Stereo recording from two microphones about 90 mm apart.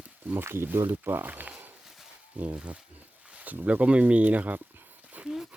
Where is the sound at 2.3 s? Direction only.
15° right (ahead or behind).